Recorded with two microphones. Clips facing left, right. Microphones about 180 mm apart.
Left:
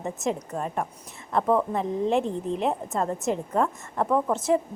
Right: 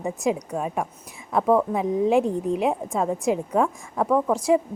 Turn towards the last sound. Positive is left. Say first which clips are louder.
# right 3 dB
turn(degrees=0)  # may be behind; listen again after turning